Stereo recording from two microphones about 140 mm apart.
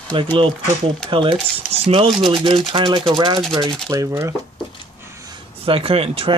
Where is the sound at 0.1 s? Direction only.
35° right (ahead or behind).